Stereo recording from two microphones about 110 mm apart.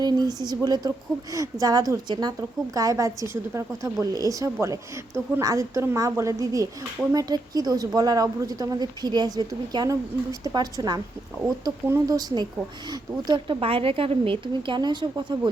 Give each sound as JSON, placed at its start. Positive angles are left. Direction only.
{"t": 0.0, "sound": "a woman's voice", "side_deg": -40}
{"t": 13.6, "sound": "speech", "side_deg": -60}